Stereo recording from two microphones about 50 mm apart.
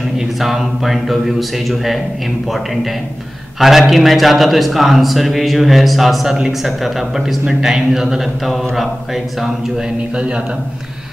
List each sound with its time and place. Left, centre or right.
0.4 s a man's voice: centre
10.1 s a man's voice: right